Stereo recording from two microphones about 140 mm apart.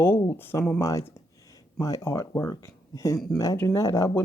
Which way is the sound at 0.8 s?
20° left (ahead or behind).